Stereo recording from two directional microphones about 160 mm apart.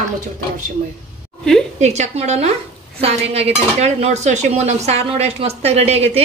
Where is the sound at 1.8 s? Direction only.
45° right (ahead or behind).